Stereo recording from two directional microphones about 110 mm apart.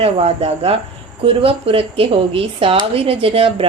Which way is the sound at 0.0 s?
60° right (ahead or behind).